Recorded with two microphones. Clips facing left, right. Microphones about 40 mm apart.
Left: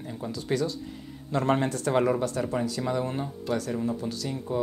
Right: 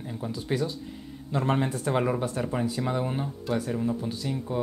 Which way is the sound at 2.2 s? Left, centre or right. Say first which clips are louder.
Left 1 dB; centre.